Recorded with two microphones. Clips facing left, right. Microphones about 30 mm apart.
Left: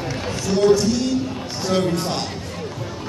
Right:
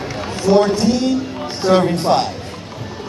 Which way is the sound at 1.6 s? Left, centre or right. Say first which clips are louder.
Right 7 dB; right.